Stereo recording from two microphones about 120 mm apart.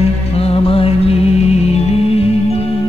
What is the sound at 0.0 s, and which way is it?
Music, 55° left (ahead or behind).